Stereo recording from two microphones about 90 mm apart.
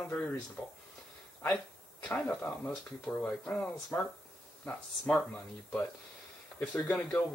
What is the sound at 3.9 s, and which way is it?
Speech, 25° left (ahead or behind).